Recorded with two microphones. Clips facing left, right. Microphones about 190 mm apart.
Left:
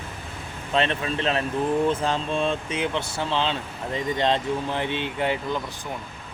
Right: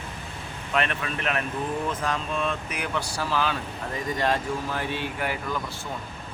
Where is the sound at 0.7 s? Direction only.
25° left (ahead or behind).